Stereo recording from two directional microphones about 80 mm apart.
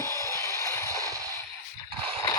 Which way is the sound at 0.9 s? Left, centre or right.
Right.